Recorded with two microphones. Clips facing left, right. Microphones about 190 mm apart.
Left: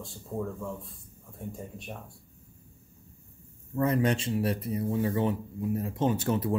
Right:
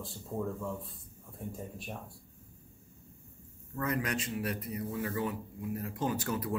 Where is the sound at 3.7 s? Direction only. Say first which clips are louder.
Left 8 dB; 30° left (ahead or behind).